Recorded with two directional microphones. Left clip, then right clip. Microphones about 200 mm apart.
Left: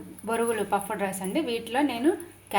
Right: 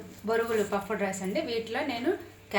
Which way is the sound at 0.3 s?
50° left (ahead or behind).